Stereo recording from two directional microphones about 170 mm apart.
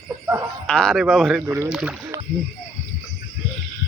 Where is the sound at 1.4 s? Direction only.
15° right (ahead or behind).